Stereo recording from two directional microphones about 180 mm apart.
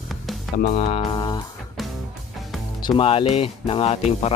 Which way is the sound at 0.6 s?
35° left (ahead or behind).